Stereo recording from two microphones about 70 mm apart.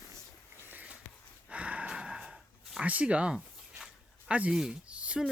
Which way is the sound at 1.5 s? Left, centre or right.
Centre.